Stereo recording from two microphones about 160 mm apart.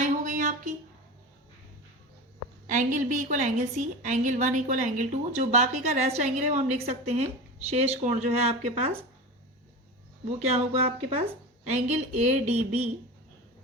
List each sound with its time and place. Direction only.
0.0 s a sound: 55° right (ahead or behind)
2.6 s a woman's voice: 55° right (ahead or behind)
10.5 s a woman's voice: 40° right (ahead or behind)